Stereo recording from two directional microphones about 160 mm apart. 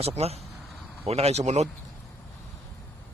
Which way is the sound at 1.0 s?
40° right (ahead or behind).